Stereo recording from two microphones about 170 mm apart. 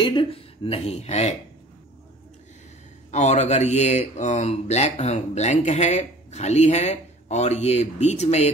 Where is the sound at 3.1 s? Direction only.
40° left (ahead or behind).